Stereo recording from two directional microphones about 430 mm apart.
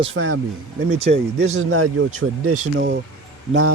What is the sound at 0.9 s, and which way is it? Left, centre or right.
Speech, centre.